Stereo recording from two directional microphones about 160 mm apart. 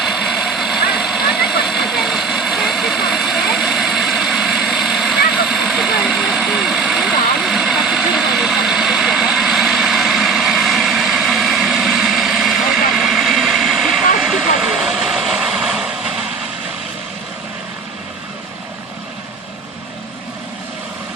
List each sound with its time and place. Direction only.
0.0 s vehicle: centre (ahead or behind)